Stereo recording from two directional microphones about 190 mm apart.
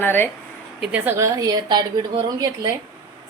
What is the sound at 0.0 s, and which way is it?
Speech, 10° left (ahead or behind).